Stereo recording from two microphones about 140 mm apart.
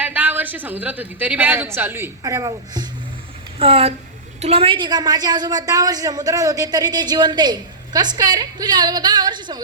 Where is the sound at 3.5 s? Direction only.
45° right (ahead or behind).